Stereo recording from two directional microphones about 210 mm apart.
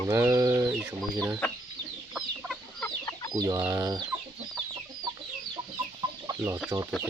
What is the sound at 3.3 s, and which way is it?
Speech, 15° right (ahead or behind).